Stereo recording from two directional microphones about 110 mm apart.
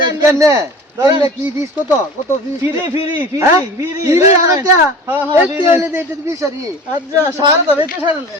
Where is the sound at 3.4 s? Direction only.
25° right (ahead or behind).